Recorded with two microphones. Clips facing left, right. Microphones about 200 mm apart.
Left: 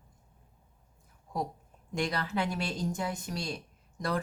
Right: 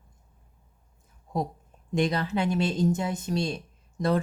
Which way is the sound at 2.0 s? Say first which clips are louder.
Right 6 dB; 20° right (ahead or behind).